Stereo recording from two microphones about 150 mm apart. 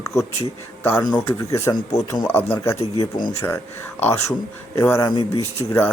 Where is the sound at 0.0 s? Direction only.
20° left (ahead or behind).